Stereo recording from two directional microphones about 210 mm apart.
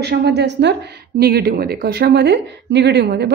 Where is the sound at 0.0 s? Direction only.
50° right (ahead or behind).